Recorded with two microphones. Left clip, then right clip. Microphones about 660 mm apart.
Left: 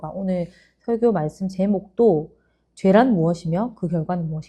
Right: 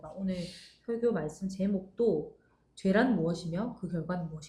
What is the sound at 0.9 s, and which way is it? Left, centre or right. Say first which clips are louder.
A woman's voice: left 11 dB; left.